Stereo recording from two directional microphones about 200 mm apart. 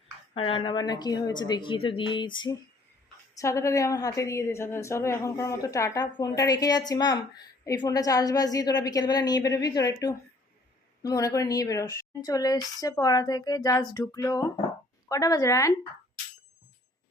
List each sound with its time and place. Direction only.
0.3 s a woman's voice: 25° left (ahead or behind)